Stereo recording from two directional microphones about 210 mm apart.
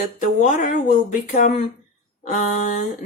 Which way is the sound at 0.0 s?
35° left (ahead or behind).